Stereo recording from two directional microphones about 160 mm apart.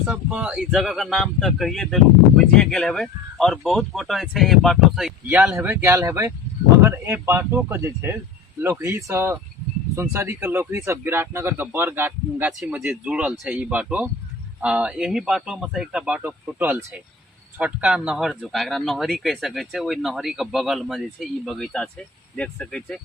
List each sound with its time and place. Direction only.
0.1 s speech: 10° right (ahead or behind)